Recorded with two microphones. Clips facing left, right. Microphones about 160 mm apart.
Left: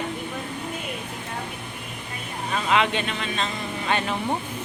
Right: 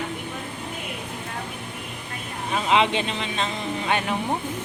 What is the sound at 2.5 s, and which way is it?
Speech, 25° right (ahead or behind).